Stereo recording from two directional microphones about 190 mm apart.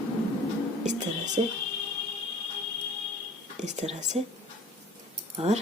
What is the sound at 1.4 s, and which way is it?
Speech, 30° right (ahead or behind).